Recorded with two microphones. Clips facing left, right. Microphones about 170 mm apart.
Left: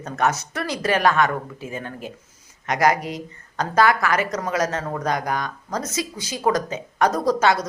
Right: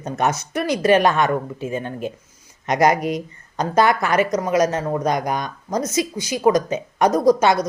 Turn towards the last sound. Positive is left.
turn(degrees=-15)  # may be behind; listen again after turning